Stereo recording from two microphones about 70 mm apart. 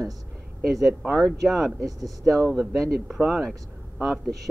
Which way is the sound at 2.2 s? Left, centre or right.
Centre.